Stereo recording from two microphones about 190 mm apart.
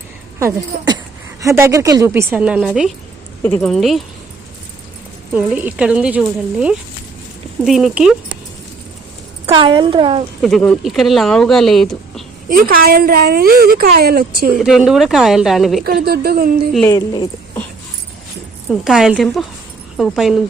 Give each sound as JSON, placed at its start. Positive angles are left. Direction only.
{"t": 0.3, "sound": "a woman's voice", "side_deg": -15}
{"t": 3.4, "sound": "speech", "side_deg": 5}
{"t": 5.3, "sound": "speech", "side_deg": -10}
{"t": 9.5, "sound": "speech", "side_deg": -25}
{"t": 10.4, "sound": "speech", "side_deg": 5}
{"t": 12.5, "sound": "speech", "side_deg": -50}
{"t": 14.6, "sound": "speech", "side_deg": -5}
{"t": 15.8, "sound": "speech", "side_deg": -55}
{"t": 16.9, "sound": "speech", "side_deg": 20}
{"t": 18.7, "sound": "speech", "side_deg": 0}